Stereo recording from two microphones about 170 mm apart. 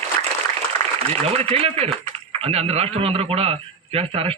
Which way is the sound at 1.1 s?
35° right (ahead or behind).